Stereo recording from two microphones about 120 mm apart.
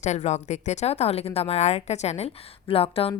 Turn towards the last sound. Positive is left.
turn(degrees=50)  # may be behind; listen again after turning